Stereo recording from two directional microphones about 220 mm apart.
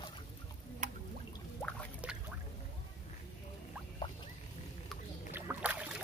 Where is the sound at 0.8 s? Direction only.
35° right (ahead or behind).